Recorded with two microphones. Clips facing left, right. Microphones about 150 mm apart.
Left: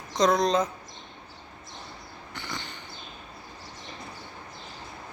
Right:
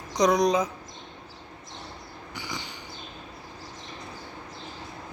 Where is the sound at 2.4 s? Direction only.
10° right (ahead or behind).